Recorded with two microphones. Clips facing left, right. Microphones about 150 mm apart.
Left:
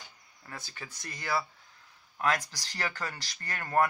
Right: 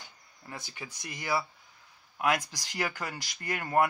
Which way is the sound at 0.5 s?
15° right (ahead or behind).